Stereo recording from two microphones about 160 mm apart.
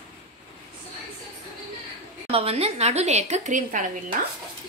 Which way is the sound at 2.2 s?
40° right (ahead or behind).